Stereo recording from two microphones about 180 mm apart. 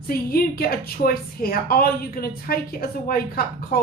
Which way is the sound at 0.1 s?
55° left (ahead or behind).